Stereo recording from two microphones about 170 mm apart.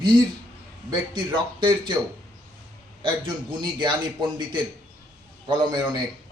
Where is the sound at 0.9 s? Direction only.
25° right (ahead or behind).